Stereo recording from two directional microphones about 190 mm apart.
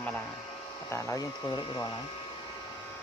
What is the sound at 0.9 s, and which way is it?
Speech, 20° left (ahead or behind).